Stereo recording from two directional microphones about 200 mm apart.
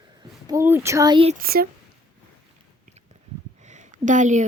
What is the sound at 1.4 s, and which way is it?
Speech, 50° right (ahead or behind).